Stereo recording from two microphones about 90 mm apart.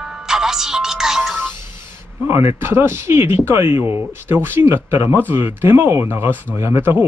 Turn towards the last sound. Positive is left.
turn(degrees=-25)  # may be behind; listen again after turning